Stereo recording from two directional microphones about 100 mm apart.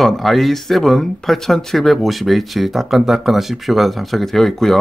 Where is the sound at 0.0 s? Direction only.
Centre (ahead or behind).